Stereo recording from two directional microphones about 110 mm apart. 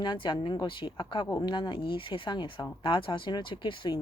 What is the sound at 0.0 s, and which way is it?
Speech, 45° left (ahead or behind).